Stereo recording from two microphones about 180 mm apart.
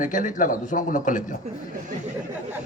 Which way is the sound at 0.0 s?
45° left (ahead or behind).